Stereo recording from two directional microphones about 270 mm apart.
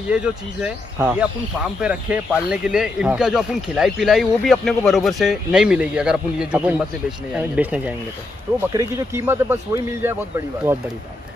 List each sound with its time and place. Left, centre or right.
0.1 s a man's voice: centre